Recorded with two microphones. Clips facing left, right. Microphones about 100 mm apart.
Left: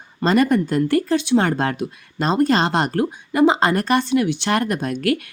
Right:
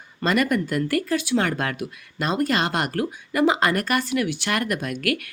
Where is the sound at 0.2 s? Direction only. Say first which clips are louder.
Left 5 dB; 30° left (ahead or behind).